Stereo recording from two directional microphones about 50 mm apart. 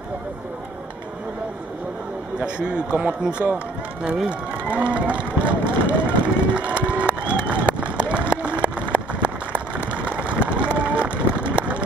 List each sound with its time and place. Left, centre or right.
2.4 s speech: centre
6.5 s run: right